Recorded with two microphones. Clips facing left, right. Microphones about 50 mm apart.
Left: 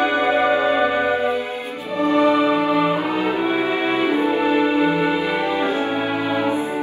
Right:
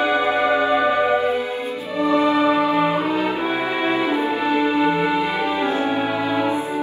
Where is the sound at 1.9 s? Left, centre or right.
Left.